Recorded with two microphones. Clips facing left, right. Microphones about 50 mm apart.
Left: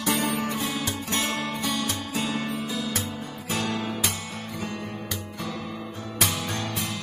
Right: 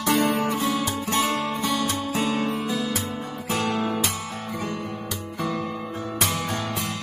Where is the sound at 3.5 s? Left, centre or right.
Right.